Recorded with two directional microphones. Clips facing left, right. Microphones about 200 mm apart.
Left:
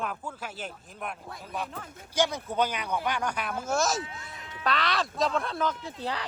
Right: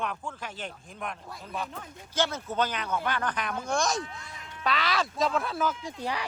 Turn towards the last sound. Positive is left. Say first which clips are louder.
# right 1 dB
turn(degrees=-15)  # may be behind; listen again after turning